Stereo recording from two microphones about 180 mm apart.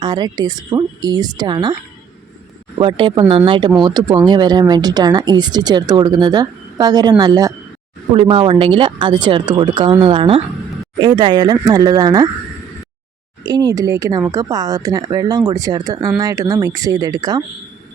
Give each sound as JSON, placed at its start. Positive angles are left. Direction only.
{"t": 0.0, "sound": "speech", "side_deg": -25}
{"t": 2.7, "sound": "speech", "side_deg": -25}
{"t": 8.1, "sound": "speech", "side_deg": -30}
{"t": 13.4, "sound": "speech", "side_deg": -20}